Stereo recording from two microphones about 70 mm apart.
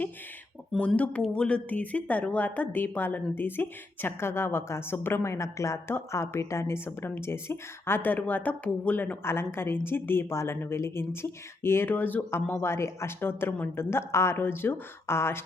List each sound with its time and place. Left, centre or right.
0.8 s a woman's voice: centre
9.2 s a woman's voice: left